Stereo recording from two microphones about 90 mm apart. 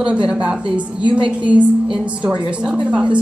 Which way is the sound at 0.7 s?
60° right (ahead or behind).